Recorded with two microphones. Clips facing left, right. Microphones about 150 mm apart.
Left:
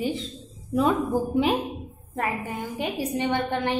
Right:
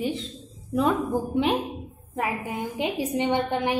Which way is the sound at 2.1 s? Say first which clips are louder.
Even; 10° right (ahead or behind).